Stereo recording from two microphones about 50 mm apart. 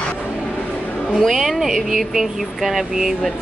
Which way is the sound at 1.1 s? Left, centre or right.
Centre.